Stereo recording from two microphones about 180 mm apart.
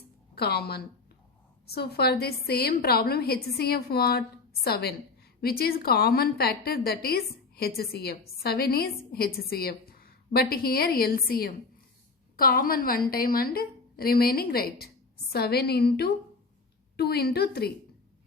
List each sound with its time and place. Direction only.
0.3 s a woman's voice: 60° left (ahead or behind)